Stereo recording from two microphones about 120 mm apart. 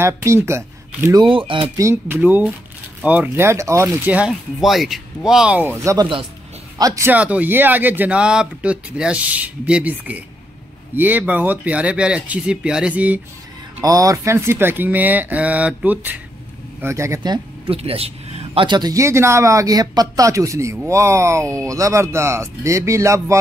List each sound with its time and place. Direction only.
0.0 s speech: 25° right (ahead or behind)
1.2 s speech: 45° right (ahead or behind)
1.8 s speech: 20° right (ahead or behind)
6.8 s speech: 30° right (ahead or behind)
7.1 s speech: 10° right (ahead or behind)
13.8 s speech: 30° right (ahead or behind)
17.6 s a man's voice: 55° right (ahead or behind); by 23.4 s 25° right (ahead or behind)